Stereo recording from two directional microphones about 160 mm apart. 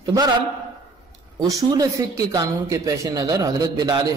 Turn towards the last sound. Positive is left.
turn(degrees=-25)  # may be behind; listen again after turning